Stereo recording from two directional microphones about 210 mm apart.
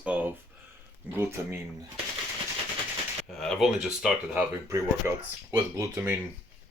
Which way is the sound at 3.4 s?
Centre (ahead or behind).